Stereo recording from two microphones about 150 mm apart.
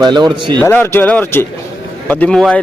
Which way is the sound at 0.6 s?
15° left (ahead or behind).